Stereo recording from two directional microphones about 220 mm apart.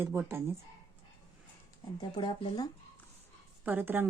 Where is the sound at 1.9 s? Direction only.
20° left (ahead or behind).